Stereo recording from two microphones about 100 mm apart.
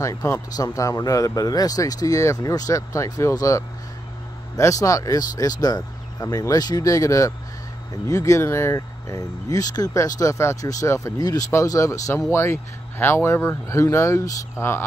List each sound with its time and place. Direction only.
0.0 s speech: 30° left (ahead or behind)